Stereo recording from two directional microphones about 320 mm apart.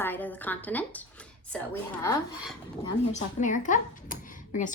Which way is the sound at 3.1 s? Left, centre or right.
Left.